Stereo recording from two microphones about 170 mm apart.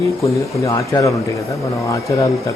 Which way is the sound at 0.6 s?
20° left (ahead or behind).